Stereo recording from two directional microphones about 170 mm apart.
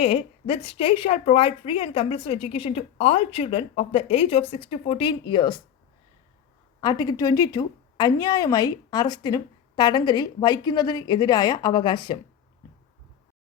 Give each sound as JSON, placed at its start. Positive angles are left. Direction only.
{"t": 0.0, "sound": "speech", "side_deg": 35}
{"t": 6.8, "sound": "a woman's voice", "side_deg": 25}